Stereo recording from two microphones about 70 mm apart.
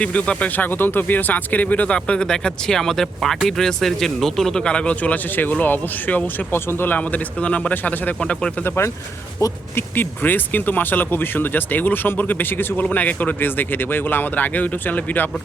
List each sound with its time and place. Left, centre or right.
0.0 s speech: centre
8.2 s speech: centre
8.6 s speech: left
9.4 s speech: left
9.7 s speech: left